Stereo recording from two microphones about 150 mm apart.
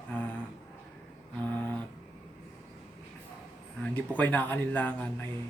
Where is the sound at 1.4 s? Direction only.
10° left (ahead or behind).